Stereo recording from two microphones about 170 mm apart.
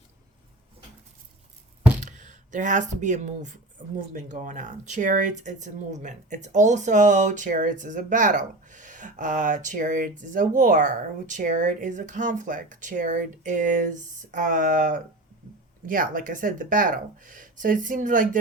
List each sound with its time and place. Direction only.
2.0 s speech: 45° right (ahead or behind)